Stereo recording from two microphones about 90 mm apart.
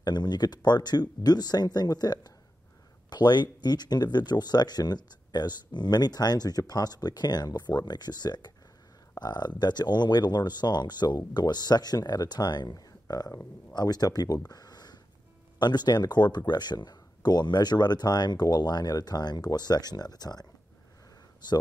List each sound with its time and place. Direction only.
0.0 s speech: 55° left (ahead or behind)